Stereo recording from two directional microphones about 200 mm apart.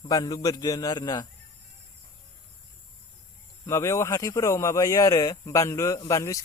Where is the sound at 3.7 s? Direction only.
15° left (ahead or behind).